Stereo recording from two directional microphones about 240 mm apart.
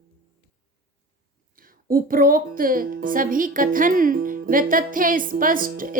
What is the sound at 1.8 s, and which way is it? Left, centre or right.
Speech, right.